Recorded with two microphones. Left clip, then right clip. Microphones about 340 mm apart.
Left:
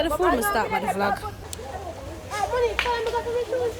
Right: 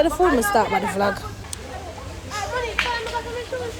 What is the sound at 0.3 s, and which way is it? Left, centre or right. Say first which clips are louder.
Speech: right 4 dB; centre.